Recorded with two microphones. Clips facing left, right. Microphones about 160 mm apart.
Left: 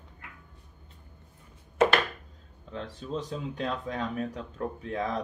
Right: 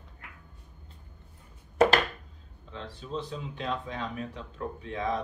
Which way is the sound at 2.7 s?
45° left (ahead or behind).